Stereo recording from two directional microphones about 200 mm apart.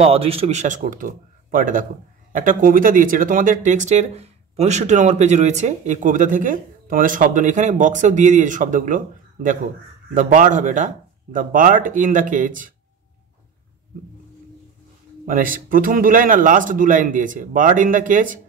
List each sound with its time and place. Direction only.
0.0 s speech: 30° right (ahead or behind)
15.2 s speech: 45° right (ahead or behind)